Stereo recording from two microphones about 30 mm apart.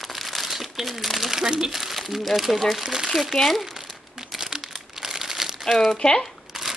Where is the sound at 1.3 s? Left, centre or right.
Centre.